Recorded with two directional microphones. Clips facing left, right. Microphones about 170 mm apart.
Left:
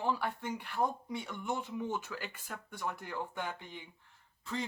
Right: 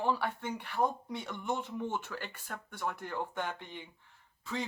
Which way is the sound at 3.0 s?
5° left (ahead or behind).